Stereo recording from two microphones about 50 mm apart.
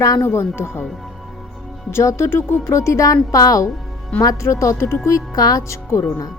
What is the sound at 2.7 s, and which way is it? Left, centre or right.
Speech, left.